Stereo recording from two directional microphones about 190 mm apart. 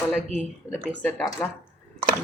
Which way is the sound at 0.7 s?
10° left (ahead or behind).